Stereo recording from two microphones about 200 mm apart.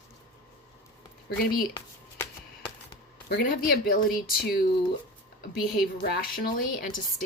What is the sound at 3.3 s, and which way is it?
Speech, 55° left (ahead or behind).